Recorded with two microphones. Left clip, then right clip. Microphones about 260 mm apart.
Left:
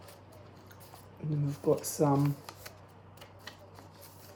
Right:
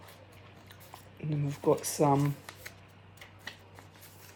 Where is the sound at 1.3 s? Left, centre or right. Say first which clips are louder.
Right 1 dB; right.